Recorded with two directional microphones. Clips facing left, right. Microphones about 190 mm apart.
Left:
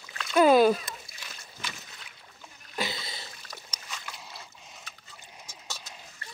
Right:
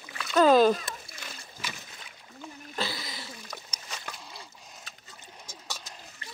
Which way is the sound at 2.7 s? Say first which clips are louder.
Left 1 dB; 20° left (ahead or behind).